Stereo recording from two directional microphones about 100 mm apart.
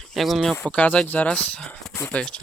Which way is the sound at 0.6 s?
15° left (ahead or behind).